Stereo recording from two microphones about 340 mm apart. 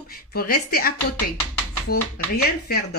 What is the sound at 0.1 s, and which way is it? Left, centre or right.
Speech, left.